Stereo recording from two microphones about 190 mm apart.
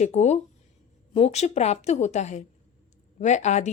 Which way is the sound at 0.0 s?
35° left (ahead or behind).